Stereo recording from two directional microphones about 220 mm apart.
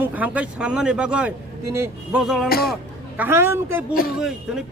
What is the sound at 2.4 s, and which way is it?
Speech, 45° left (ahead or behind).